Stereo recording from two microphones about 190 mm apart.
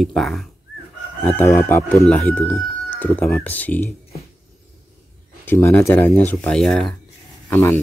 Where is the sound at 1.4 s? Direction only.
15° left (ahead or behind).